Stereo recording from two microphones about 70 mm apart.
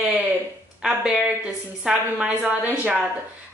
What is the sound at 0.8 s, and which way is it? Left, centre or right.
A woman's voice, centre.